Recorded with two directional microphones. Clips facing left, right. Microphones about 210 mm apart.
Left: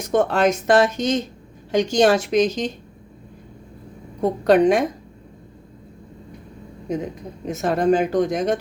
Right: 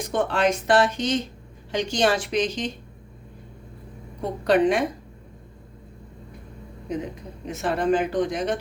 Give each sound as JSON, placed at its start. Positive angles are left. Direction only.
{"t": 0.0, "sound": "speech", "side_deg": 45}
{"t": 4.2, "sound": "speech", "side_deg": 45}
{"t": 7.4, "sound": "speech", "side_deg": 45}